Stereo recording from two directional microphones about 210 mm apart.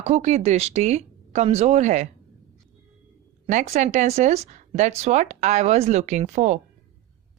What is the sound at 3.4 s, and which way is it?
Speech, 35° right (ahead or behind).